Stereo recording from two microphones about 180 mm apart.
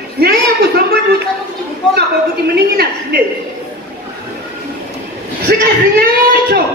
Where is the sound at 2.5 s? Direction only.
60° right (ahead or behind).